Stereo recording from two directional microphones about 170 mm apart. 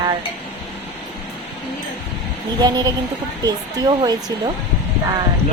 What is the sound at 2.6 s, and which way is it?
Speech, 25° right (ahead or behind).